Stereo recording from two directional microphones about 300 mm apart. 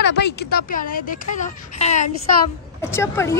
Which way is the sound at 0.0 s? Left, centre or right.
Left.